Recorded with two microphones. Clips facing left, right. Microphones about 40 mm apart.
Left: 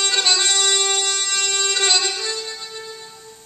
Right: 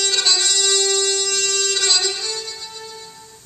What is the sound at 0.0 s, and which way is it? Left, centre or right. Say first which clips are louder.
Music: left 1 dB; centre.